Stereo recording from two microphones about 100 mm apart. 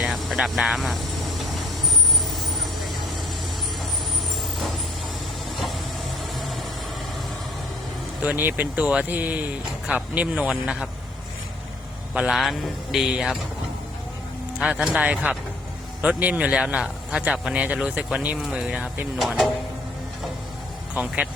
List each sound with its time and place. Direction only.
0.0 s vehicle: centre (ahead or behind)
2.7 s vehicle: centre (ahead or behind)
8.2 s speech: 15° right (ahead or behind)
12.1 s speech: 10° right (ahead or behind)
14.6 s speech: 5° right (ahead or behind)
20.9 s speech: 15° right (ahead or behind)